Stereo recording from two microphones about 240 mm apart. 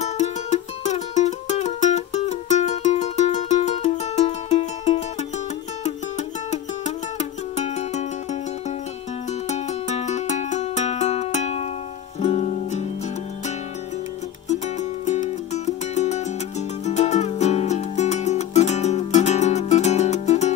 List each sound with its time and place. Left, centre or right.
0.0 s music: left
14.5 s music: left